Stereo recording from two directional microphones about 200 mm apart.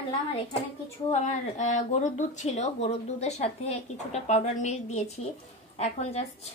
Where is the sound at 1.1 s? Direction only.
35° left (ahead or behind).